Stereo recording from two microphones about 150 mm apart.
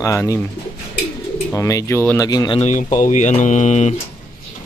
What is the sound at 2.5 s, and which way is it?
Speech, 50° left (ahead or behind).